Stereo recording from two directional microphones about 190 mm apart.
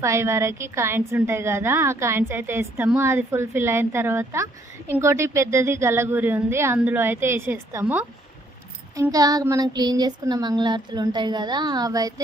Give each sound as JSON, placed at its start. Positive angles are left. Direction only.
{"t": 0.0, "sound": "a woman's voice", "side_deg": -15}
{"t": 9.0, "sound": "child singing", "side_deg": -20}